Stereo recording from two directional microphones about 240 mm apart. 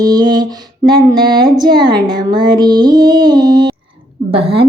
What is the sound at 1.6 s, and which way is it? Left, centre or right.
Music, centre.